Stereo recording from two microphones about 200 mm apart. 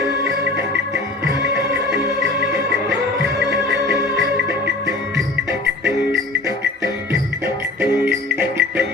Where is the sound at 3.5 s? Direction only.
60° right (ahead or behind).